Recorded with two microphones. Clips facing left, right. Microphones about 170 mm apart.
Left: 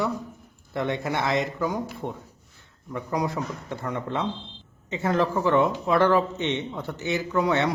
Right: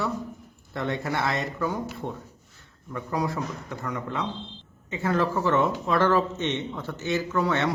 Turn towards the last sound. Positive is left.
turn(degrees=15)  # may be behind; listen again after turning